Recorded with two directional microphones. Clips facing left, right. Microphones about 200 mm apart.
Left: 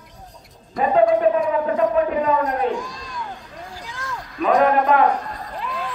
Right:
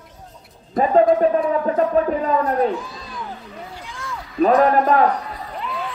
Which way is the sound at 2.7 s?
5° right (ahead or behind).